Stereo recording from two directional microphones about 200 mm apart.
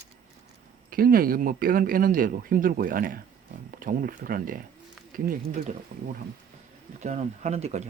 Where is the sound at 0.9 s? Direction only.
45° right (ahead or behind).